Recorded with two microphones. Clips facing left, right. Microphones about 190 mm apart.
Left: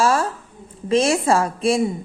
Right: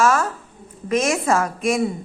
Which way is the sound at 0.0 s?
30° left (ahead or behind).